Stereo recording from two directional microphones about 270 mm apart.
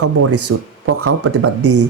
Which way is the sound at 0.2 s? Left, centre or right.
Right.